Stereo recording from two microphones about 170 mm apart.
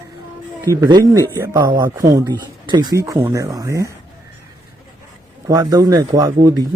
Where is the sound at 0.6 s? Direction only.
20° right (ahead or behind).